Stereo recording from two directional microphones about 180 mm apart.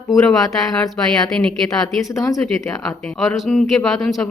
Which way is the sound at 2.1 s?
20° left (ahead or behind).